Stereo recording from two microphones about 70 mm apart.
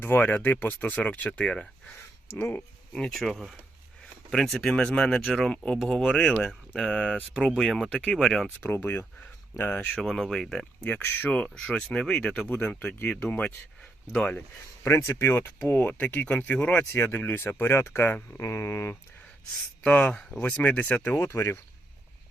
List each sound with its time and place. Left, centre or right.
0.0 s speech: left
2.2 s speech: left
2.6 s speech: centre
5.8 s speech: centre
8.6 s speech: left
9.9 s speech: centre
10.8 s speech: left
14.8 s speech: left; by 16.8 s centre
16.8 s speech: left
19.8 s speech: left
21.2 s speech: left